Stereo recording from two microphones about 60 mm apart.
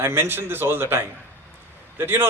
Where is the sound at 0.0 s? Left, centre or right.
Right.